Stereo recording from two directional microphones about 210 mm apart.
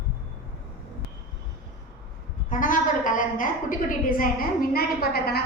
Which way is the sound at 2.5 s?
40° left (ahead or behind).